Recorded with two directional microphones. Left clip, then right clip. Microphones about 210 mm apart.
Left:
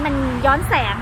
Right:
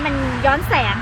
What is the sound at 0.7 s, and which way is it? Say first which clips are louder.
Speech: right 1 dB; 20° right (ahead or behind).